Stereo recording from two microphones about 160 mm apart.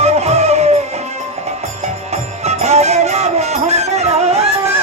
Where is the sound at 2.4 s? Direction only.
45° right (ahead or behind).